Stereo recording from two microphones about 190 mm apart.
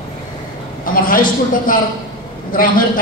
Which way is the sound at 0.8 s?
45° left (ahead or behind).